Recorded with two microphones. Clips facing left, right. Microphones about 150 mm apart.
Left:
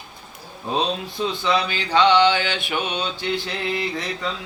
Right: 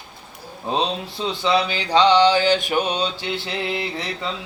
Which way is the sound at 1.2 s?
30° right (ahead or behind).